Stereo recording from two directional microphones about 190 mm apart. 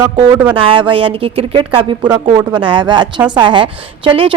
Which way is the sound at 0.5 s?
25° right (ahead or behind).